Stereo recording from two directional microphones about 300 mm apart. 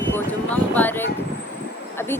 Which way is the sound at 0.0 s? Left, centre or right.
Centre.